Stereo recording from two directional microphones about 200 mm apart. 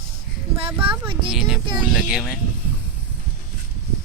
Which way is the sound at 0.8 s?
25° right (ahead or behind).